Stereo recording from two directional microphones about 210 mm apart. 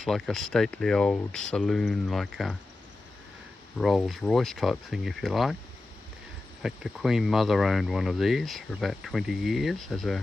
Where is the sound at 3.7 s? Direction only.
Centre (ahead or behind).